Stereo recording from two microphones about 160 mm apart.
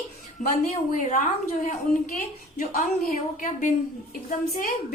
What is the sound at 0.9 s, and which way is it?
Speech, 50° left (ahead or behind).